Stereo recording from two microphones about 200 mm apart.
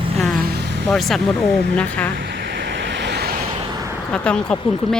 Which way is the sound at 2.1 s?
60° right (ahead or behind).